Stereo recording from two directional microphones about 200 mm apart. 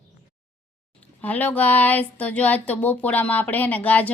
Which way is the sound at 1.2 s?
10° left (ahead or behind).